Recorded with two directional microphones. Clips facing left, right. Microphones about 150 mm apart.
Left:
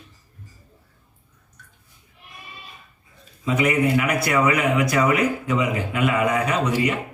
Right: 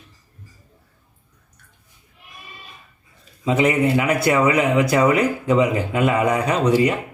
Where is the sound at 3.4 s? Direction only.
25° right (ahead or behind).